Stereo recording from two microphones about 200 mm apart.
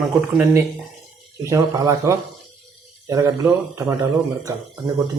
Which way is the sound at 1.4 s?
15° right (ahead or behind).